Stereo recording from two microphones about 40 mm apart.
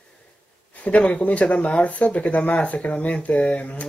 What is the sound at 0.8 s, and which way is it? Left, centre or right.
Speech, left.